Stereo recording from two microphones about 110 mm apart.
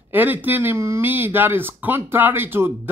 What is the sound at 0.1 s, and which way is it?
A man's voice, 15° right (ahead or behind).